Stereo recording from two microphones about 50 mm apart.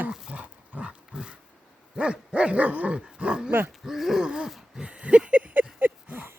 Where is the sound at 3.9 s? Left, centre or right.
Centre.